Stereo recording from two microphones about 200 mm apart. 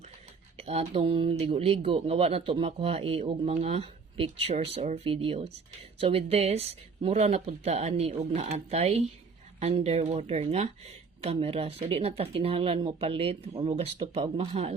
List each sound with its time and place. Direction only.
0.5 s speech: 30° right (ahead or behind)